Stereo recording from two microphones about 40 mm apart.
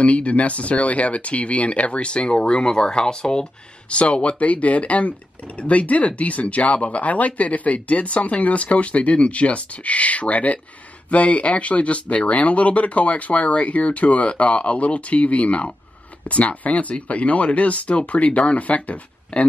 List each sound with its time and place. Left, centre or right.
0.0 s speech: left